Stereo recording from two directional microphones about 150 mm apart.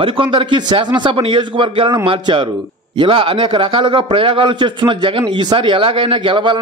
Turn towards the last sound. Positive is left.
turn(degrees=-30)  # may be behind; listen again after turning